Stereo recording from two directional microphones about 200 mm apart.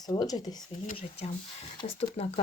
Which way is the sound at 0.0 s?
20° left (ahead or behind).